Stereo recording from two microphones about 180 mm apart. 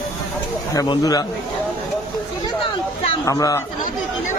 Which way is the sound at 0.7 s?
20° left (ahead or behind).